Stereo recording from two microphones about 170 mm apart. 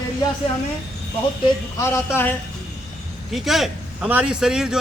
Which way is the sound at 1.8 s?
15° left (ahead or behind).